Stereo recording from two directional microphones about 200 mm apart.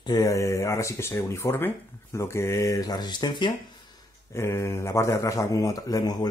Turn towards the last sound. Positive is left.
turn(degrees=20)  # may be behind; listen again after turning